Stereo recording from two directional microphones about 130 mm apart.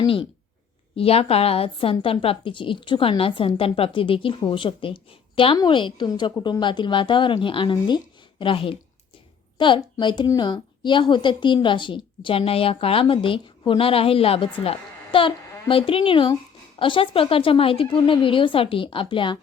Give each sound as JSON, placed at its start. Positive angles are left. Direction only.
{"t": 0.0, "sound": "a woman's voice", "side_deg": 40}